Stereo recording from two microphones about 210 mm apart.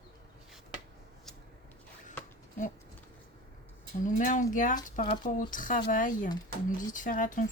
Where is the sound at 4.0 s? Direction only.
35° left (ahead or behind).